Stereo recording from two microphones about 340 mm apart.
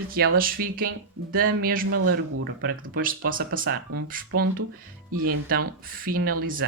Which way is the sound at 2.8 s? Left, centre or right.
Right.